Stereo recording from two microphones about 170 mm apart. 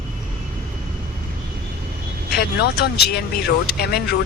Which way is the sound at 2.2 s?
70° left (ahead or behind).